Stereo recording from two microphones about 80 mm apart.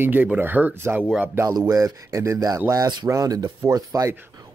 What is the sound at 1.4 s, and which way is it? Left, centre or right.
Speech, right.